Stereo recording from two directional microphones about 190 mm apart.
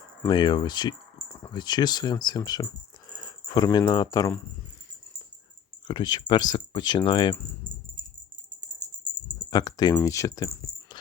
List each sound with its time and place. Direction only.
0.3 s speech: 25° left (ahead or behind)
5.9 s speech: 25° left (ahead or behind)
9.5 s speech: 20° left (ahead or behind)